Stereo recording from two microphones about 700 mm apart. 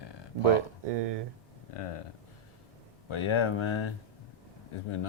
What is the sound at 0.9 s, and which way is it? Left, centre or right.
Speech, right.